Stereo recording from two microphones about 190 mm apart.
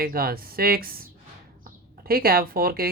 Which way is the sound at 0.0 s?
50° right (ahead or behind).